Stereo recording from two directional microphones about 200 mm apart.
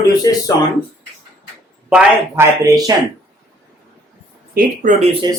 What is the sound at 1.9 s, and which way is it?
Speech, 10° right (ahead or behind).